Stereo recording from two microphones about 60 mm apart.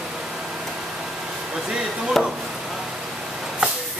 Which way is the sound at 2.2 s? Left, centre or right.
Centre.